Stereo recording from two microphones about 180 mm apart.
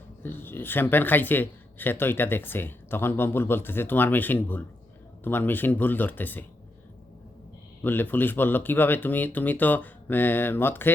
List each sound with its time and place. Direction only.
0.2 s a man's voice: 10° left (ahead or behind)
7.8 s a man's voice: 10° left (ahead or behind)